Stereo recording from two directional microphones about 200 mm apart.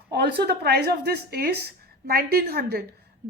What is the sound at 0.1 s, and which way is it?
A woman's voice, 55° right (ahead or behind).